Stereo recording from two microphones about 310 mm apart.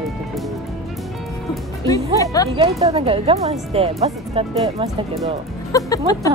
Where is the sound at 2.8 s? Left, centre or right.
Centre.